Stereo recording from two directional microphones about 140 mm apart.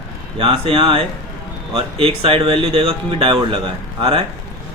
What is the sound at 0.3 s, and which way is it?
Speech, 40° right (ahead or behind).